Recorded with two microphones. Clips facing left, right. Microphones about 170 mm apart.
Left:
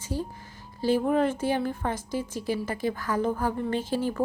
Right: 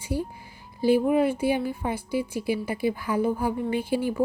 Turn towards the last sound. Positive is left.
turn(degrees=-10)  # may be behind; listen again after turning